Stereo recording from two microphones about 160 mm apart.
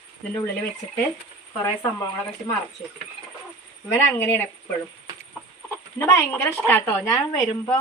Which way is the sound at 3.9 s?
15° left (ahead or behind).